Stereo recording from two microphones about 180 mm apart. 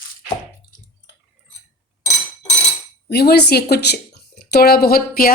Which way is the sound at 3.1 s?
65° left (ahead or behind).